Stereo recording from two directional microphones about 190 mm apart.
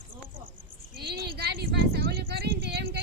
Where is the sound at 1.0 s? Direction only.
55° right (ahead or behind).